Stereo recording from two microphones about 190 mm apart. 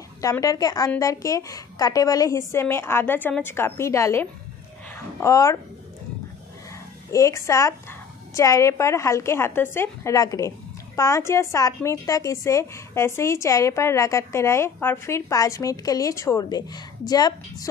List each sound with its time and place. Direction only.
0.2 s a woman's voice: 20° left (ahead or behind)
7.1 s a woman's voice: 15° left (ahead or behind)